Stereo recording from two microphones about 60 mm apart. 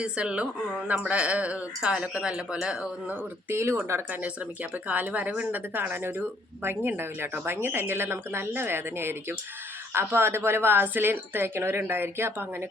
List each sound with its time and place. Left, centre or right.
0.0 s speech: centre
3.5 s speech: right
4.9 s a woman's voice: right